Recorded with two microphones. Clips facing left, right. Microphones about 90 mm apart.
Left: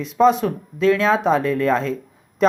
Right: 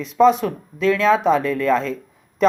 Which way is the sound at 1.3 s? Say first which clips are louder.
Even; 35° left (ahead or behind).